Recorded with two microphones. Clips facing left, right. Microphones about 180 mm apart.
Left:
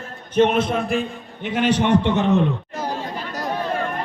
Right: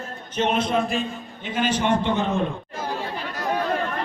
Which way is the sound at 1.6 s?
65° left (ahead or behind).